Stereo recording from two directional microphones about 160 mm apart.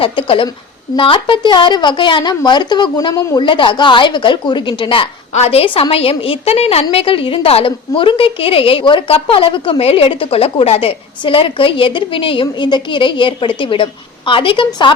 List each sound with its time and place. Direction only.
0.0 s a woman's voice: 35° left (ahead or behind)